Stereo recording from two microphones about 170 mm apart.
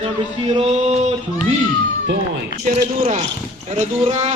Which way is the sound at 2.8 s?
45° right (ahead or behind).